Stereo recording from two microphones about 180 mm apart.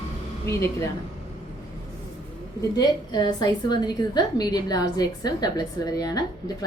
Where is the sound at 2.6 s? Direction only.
20° left (ahead or behind).